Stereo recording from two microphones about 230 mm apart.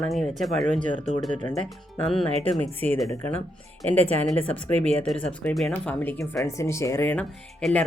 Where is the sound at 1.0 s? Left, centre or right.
Left.